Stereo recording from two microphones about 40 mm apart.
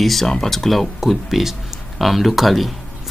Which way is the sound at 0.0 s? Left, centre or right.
Centre.